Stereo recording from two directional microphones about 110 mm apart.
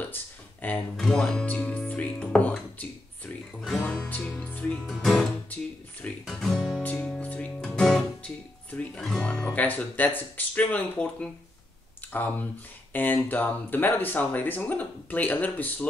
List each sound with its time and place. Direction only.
0.1 s a sound: 15° left (ahead or behind)
0.9 s speech: 5° left (ahead or behind)
3.8 s music: 10° left (ahead or behind)
4.8 s speech: 5° left (ahead or behind)
6.0 s guitar: 5° left (ahead or behind)
6.8 s music: 10° left (ahead or behind)
9.3 s speech: 15° left (ahead or behind)